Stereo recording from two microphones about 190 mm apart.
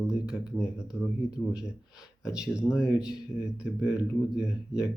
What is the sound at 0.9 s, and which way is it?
Speech, 15° left (ahead or behind).